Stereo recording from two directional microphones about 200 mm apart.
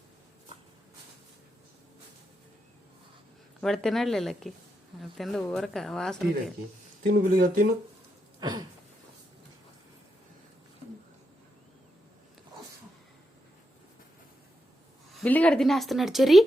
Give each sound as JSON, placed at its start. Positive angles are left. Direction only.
{"t": 3.6, "sound": "a woman's voice", "side_deg": 0}
{"t": 7.1, "sound": "speech", "side_deg": -45}
{"t": 8.4, "sound": "a sound", "side_deg": -20}
{"t": 15.1, "sound": "a woman's voice", "side_deg": 5}